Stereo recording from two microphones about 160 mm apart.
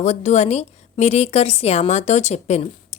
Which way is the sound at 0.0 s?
45° left (ahead or behind).